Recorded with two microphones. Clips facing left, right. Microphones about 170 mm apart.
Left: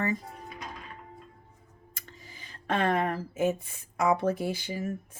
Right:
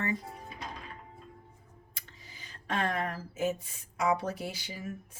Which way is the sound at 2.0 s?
50° left (ahead or behind).